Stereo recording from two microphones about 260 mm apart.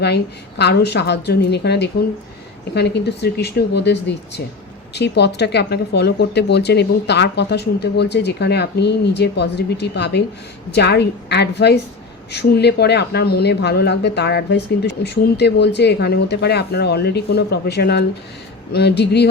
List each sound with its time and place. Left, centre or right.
0.6 s speech: left